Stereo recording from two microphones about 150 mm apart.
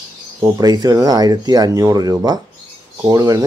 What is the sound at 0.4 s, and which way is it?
A man's voice, 25° right (ahead or behind).